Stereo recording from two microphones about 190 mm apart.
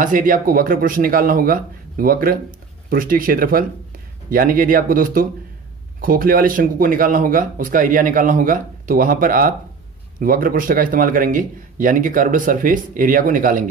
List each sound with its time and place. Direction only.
0.0 s speech: 45° right (ahead or behind)